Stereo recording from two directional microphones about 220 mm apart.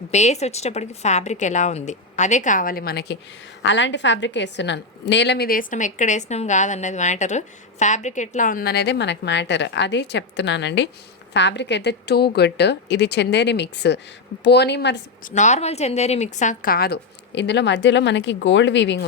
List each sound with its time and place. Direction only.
0.1 s a woman's voice: 30° left (ahead or behind); by 15.3 s 50° left (ahead or behind)
15.4 s a woman's voice: 30° left (ahead or behind); by 18.9 s 55° left (ahead or behind)